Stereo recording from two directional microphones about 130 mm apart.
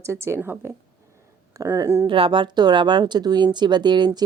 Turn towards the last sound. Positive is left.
turn(degrees=-35)  # may be behind; listen again after turning